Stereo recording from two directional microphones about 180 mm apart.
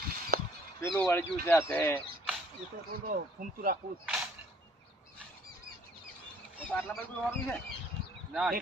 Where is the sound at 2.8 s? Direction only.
55° right (ahead or behind).